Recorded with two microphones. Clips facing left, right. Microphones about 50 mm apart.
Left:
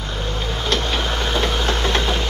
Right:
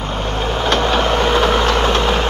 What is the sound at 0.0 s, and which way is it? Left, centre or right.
Vehicle, right.